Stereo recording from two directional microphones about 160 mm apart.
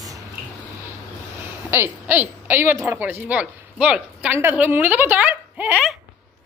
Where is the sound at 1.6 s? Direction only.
15° right (ahead or behind).